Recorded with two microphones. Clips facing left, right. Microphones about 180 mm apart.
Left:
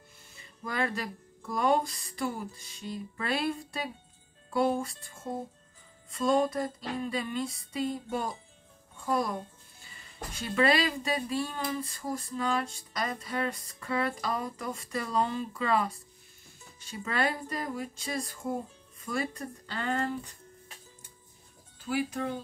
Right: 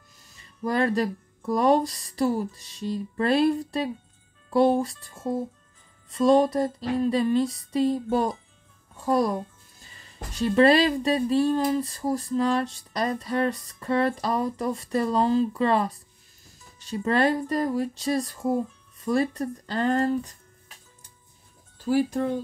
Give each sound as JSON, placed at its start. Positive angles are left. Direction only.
{"t": 0.4, "sound": "speech", "side_deg": -35}
{"t": 6.1, "sound": "speech", "side_deg": -35}
{"t": 16.9, "sound": "speech", "side_deg": -35}
{"t": 21.7, "sound": "speech", "side_deg": -35}